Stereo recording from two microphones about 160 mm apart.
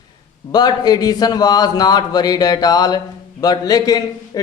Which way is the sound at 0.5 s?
25° left (ahead or behind).